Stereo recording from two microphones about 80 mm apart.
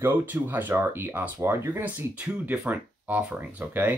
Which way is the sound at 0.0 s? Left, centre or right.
Right.